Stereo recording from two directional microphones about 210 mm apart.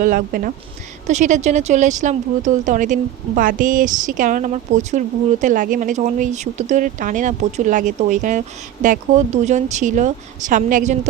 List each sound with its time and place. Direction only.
0.0 s speech: 40° right (ahead or behind)